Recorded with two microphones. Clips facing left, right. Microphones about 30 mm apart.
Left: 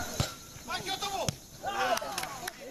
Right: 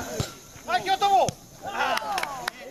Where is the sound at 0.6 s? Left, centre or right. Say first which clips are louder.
Right 12 dB; right.